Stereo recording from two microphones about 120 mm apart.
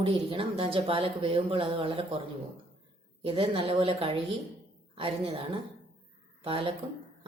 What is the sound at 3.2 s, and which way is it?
Speech, 50° right (ahead or behind).